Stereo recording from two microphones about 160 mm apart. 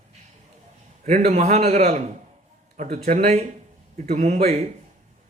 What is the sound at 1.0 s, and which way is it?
A man's voice, 55° right (ahead or behind).